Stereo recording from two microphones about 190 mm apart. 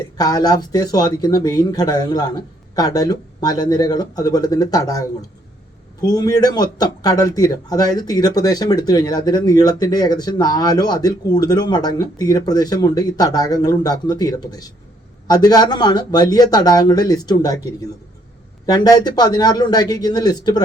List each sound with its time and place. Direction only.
0.2 s speech: 20° left (ahead or behind)
18.6 s speech: 20° left (ahead or behind)